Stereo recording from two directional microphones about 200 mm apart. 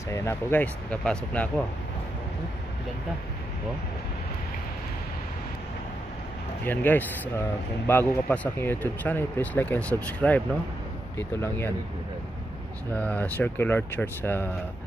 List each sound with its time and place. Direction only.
0.1 s speech: 15° left (ahead or behind)
6.6 s speech: 10° left (ahead or behind)
12.9 s speech: 10° left (ahead or behind)